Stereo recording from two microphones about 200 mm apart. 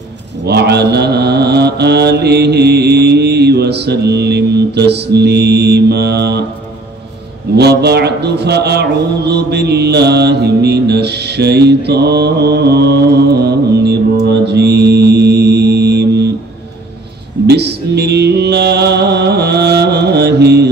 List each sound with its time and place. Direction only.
0.5 s mantra: 55° right (ahead or behind)
7.5 s mantra: 55° right (ahead or behind)
17.5 s music: 55° right (ahead or behind)